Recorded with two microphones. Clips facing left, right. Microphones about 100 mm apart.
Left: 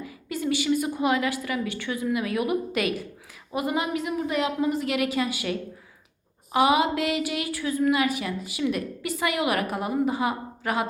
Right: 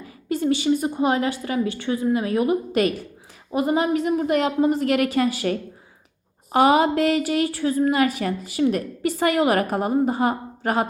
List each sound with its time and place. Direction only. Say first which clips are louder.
0.0 s a woman's voice: right 6 dB; 40° right (ahead or behind)